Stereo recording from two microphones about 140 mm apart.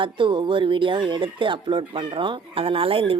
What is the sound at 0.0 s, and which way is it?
Speech, 35° right (ahead or behind).